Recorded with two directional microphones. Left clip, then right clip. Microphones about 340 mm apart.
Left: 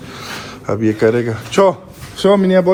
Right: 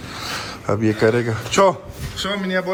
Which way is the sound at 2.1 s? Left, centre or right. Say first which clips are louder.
Left 11 dB; centre.